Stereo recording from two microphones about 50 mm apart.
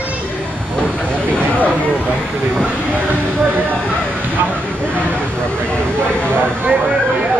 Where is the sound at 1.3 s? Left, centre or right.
Left.